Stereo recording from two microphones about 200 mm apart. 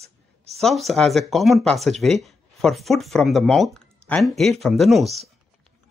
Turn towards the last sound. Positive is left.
turn(degrees=0)  # may be behind; listen again after turning